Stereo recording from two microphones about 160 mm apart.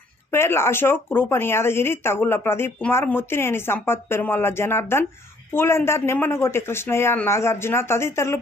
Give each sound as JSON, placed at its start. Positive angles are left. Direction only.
{"t": 0.3, "sound": "speech", "side_deg": 15}